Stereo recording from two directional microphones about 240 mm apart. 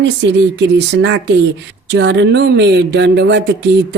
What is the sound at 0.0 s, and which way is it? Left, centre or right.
Speech, right.